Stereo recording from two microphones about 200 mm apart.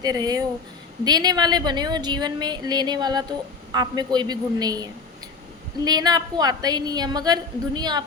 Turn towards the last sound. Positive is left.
turn(degrees=-20)  # may be behind; listen again after turning